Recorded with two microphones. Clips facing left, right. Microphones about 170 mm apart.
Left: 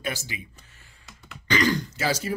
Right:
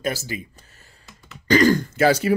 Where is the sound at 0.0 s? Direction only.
40° right (ahead or behind).